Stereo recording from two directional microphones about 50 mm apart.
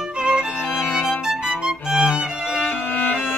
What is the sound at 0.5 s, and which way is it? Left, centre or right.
Violin, left.